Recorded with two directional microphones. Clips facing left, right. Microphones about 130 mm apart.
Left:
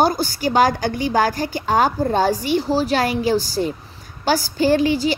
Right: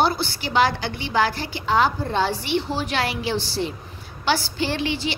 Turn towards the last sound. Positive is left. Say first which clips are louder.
# left 8 dB
turn(degrees=40)  # may be behind; listen again after turning